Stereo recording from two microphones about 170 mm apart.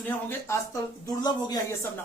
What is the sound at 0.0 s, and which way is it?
Speech, 15° left (ahead or behind).